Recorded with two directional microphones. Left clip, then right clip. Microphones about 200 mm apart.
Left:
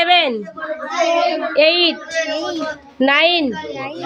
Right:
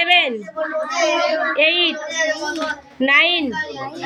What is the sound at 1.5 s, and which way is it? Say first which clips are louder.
A woman's voice: left 6 dB; 30° left (ahead or behind).